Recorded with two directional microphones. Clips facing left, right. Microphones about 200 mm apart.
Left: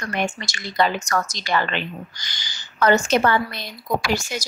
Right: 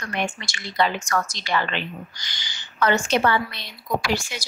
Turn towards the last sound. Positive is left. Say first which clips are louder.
# left 2 dB
turn(degrees=45)  # may be behind; listen again after turning